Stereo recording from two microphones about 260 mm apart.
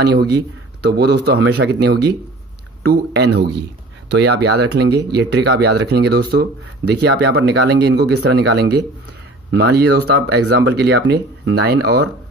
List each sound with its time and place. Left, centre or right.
0.0 s speech: right